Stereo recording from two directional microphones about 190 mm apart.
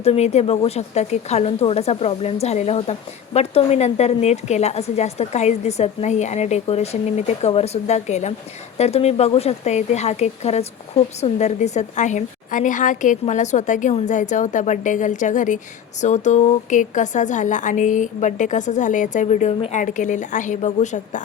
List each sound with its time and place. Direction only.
0.0 s a woman's voice: 35° left (ahead or behind)